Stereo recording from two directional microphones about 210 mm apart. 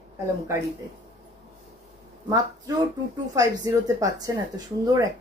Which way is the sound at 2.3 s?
20° right (ahead or behind).